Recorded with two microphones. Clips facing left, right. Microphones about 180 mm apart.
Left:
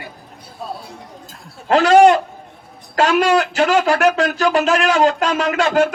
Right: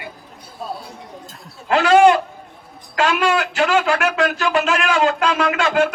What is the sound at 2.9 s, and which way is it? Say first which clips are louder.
Speech: left 4 dB; 40° left (ahead or behind).